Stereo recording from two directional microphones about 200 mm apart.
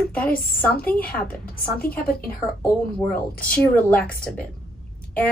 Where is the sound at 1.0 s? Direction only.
50° left (ahead or behind).